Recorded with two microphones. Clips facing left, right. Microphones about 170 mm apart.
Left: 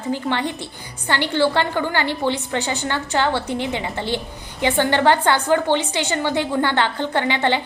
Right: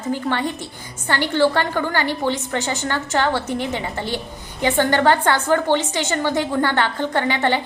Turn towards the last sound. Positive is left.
turn(degrees=15)  # may be behind; listen again after turning